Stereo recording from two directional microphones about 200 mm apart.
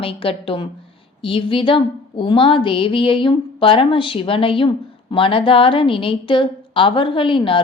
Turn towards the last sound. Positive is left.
turn(degrees=25)  # may be behind; listen again after turning